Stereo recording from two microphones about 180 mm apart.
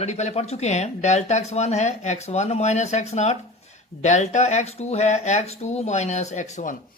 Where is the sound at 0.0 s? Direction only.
40° left (ahead or behind).